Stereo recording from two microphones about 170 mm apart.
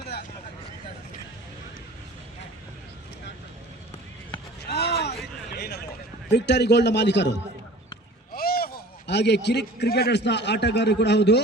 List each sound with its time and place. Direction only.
4.7 s a sound: 70° left (ahead or behind)
6.3 s a man's voice: 85° left
8.3 s a man's voice: 60° left (ahead or behind); by 11.4 s 85° left